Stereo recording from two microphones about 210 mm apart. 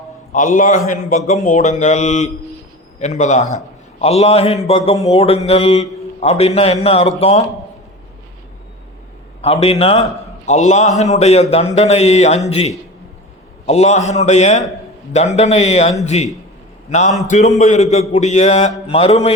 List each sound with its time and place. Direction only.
0.3 s a man's voice: 40° left (ahead or behind)
9.4 s a man's voice: 30° left (ahead or behind)